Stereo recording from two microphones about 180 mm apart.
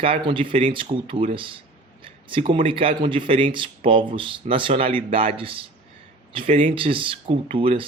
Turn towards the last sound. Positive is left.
turn(degrees=-30)  # may be behind; listen again after turning